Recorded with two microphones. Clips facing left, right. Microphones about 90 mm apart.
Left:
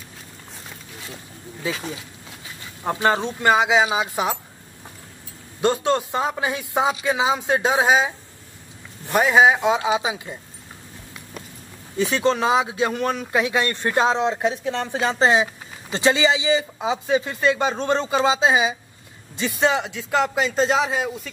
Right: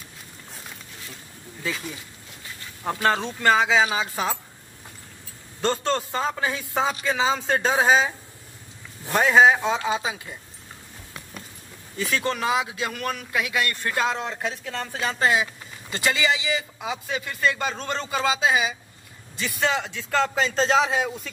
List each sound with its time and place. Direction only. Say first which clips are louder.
2.8 s a man's voice: left 3 dB; 20° left (ahead or behind)
5.6 s a man's voice: left 4 dB; 15° left (ahead or behind)
9.1 s a man's voice: left 1 dB; 10° left (ahead or behind)
12.0 s a man's voice: left 6 dB; 20° left (ahead or behind); by 21.3 s centre (ahead or behind)